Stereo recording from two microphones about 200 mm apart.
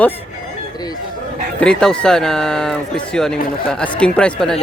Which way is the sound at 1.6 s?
5° left (ahead or behind).